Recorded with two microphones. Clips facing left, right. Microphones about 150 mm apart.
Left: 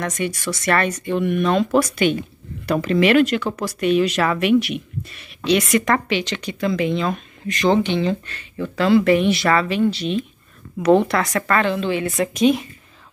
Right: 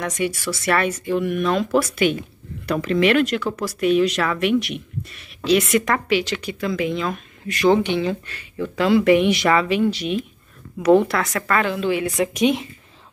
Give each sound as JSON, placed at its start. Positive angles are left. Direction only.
{"t": 0.0, "sound": "speech", "side_deg": -10}